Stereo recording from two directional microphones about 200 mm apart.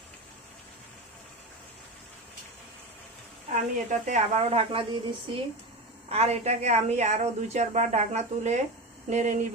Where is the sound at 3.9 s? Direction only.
35° right (ahead or behind).